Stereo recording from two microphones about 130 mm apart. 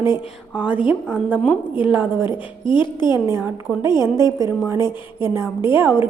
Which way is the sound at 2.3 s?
40° left (ahead or behind).